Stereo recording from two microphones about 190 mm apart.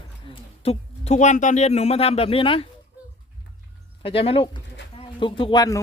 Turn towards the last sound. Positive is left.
turn(degrees=20)  # may be behind; listen again after turning